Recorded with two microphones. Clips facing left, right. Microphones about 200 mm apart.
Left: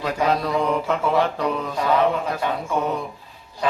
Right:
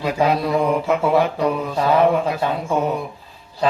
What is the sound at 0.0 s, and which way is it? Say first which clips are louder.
Mantra: right 3 dB; 5° right (ahead or behind).